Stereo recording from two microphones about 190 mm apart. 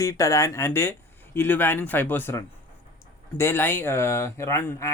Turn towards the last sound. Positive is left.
turn(degrees=10)  # may be behind; listen again after turning